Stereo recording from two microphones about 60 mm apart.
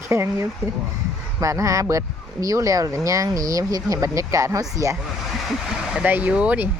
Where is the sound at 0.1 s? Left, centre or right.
Right.